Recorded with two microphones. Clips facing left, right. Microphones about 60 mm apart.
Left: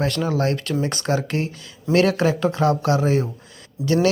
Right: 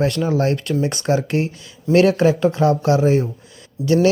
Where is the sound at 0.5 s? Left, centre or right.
Centre.